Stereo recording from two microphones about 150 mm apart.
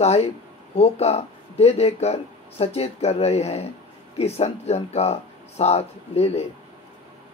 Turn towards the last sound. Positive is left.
turn(degrees=45)  # may be behind; listen again after turning